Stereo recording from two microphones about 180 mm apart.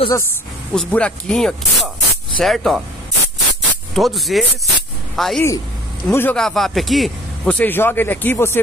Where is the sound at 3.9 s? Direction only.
Centre (ahead or behind).